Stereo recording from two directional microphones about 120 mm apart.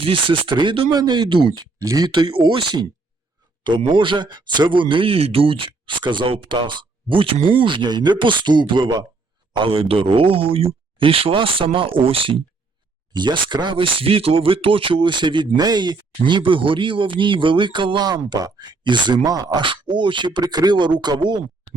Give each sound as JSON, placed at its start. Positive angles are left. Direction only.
{"t": 0.0, "sound": "a man's voice", "side_deg": -45}
{"t": 1.8, "sound": "a man's voice", "side_deg": -30}
{"t": 19.6, "sound": "speech", "side_deg": -45}